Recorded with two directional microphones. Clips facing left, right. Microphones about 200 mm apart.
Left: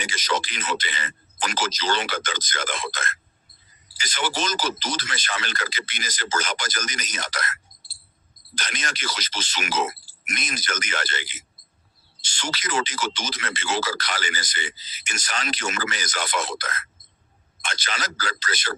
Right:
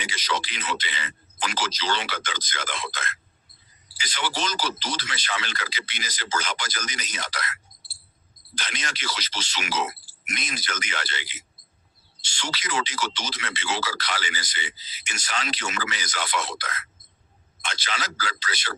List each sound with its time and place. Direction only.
0.0 s speech: 50° left (ahead or behind)